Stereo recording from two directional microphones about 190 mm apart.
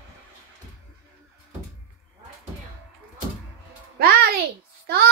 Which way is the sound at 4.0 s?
55° right (ahead or behind).